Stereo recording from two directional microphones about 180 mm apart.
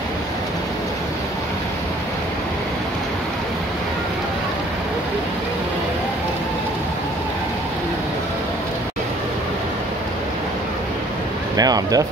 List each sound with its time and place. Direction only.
11.5 s speech: 20° right (ahead or behind)